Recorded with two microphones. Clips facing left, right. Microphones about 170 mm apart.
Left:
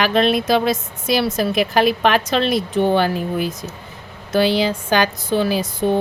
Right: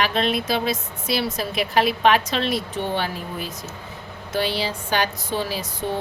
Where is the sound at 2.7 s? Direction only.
55° left (ahead or behind).